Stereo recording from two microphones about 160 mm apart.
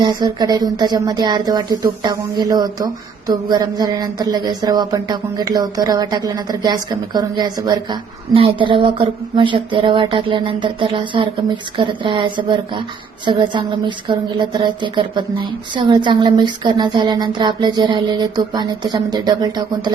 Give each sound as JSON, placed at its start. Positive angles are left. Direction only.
{"t": 0.0, "sound": "speech", "side_deg": -30}